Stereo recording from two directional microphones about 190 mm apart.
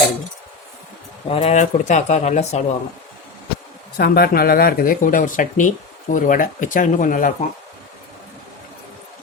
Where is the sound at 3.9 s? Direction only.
55° left (ahead or behind).